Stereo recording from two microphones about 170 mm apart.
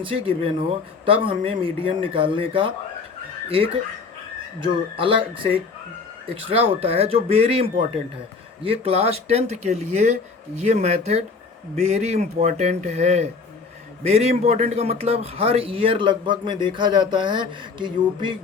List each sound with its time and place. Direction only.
0.0 s speech: 30° right (ahead or behind)
4.6 s a man's voice: 30° right (ahead or behind)